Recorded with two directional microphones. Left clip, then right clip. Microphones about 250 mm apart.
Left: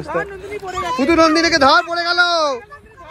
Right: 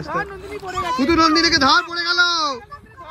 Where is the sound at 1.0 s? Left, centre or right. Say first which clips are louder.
Left 2 dB; centre.